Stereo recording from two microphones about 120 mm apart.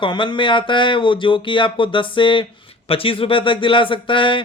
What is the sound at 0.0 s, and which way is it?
Speech, 40° left (ahead or behind).